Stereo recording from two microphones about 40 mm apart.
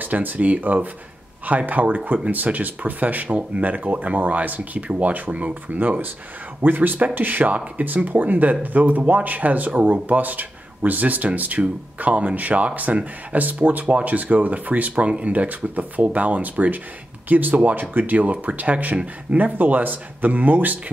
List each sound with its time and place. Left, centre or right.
0.0 s speech: right